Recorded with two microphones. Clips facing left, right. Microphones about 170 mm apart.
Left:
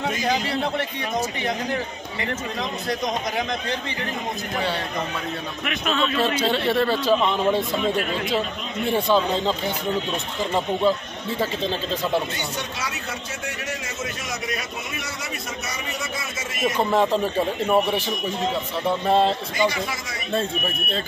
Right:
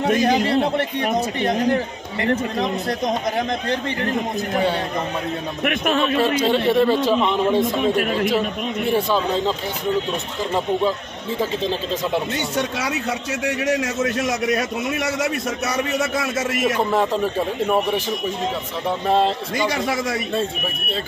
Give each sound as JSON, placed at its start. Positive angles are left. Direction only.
{"t": 0.1, "sound": "a man's voice", "side_deg": -60}
{"t": 2.9, "sound": "speech", "side_deg": -55}
{"t": 5.6, "sound": "speech", "side_deg": -50}
{"t": 6.4, "sound": "a man's voice", "side_deg": -15}
{"t": 8.8, "sound": "a man's voice", "side_deg": -5}
{"t": 12.5, "sound": "a man's voice", "side_deg": -70}
{"t": 16.6, "sound": "speech", "side_deg": -5}
{"t": 17.6, "sound": "a man's voice", "side_deg": 10}
{"t": 19.0, "sound": "speech", "side_deg": 0}
{"t": 19.7, "sound": "a man's voice", "side_deg": -65}